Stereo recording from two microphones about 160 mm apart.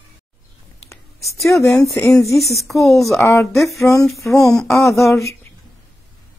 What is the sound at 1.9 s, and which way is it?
Speech, centre (ahead or behind).